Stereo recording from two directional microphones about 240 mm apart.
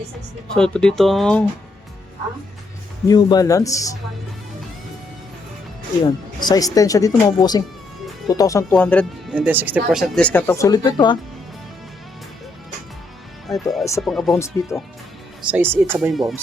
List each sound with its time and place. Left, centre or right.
0.5 s speech: centre
3.1 s speech: centre
6.4 s speech: centre
9.3 s speech: centre
13.5 s speech: centre
14.3 s speech: centre
15.4 s speech: centre